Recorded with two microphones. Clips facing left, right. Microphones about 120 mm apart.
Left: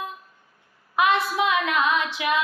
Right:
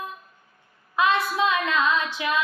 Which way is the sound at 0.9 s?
20° left (ahead or behind).